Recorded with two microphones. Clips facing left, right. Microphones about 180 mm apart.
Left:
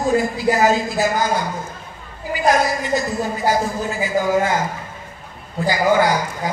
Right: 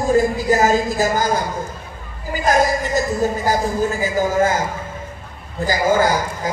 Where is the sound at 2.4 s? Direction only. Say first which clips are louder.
Right 1 dB; 45° right (ahead or behind).